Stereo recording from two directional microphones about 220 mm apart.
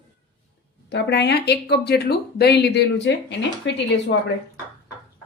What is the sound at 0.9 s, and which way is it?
Speech, 50° left (ahead or behind).